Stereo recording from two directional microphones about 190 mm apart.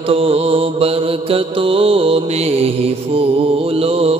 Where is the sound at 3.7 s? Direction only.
30° right (ahead or behind).